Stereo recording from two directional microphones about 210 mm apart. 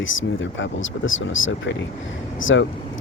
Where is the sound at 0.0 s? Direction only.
65° left (ahead or behind).